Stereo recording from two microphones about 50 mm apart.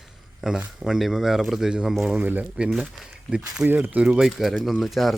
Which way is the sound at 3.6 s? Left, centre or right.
Centre.